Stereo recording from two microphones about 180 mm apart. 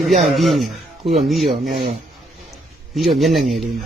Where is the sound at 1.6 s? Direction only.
45° right (ahead or behind).